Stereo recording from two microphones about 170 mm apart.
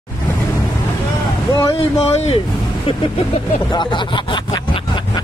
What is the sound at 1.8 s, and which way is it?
Speech, 40° left (ahead or behind).